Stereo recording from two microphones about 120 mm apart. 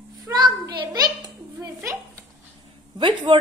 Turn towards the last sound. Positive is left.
turn(degrees=-45)  # may be behind; listen again after turning